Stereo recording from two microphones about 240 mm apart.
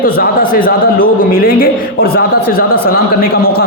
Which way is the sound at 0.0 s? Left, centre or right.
Left.